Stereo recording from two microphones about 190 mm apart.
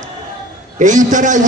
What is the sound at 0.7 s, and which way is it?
Speech, 40° right (ahead or behind).